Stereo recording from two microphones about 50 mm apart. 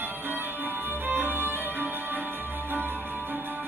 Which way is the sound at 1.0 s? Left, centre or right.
Right.